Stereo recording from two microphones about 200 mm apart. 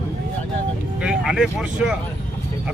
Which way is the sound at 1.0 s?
5° right (ahead or behind).